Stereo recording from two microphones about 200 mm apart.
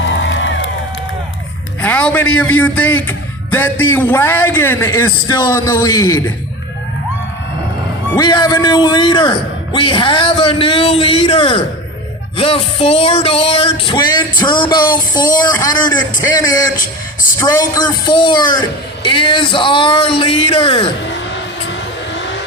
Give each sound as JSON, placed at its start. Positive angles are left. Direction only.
{"t": 0.3, "sound": "music", "side_deg": 70}
{"t": 1.8, "sound": "a man's voice", "side_deg": 5}
{"t": 5.3, "sound": "a man's voice", "side_deg": 20}
{"t": 8.1, "sound": "a man's voice", "side_deg": 20}
{"t": 21.1, "sound": "vehicle", "side_deg": 65}